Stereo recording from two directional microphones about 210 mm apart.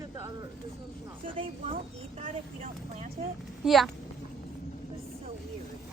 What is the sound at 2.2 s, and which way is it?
Speech, 35° right (ahead or behind).